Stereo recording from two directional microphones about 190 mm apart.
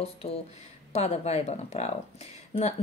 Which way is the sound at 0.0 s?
30° left (ahead or behind).